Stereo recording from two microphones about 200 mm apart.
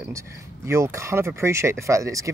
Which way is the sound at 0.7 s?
15° right (ahead or behind).